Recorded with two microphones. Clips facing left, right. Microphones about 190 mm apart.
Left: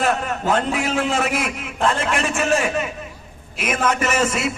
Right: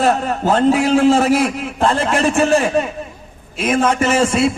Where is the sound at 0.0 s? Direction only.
35° right (ahead or behind).